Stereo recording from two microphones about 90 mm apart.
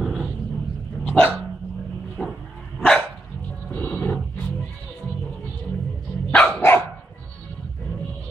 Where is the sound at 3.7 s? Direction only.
15° left (ahead or behind).